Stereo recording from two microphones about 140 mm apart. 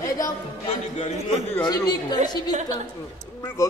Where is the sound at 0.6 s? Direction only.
50° left (ahead or behind).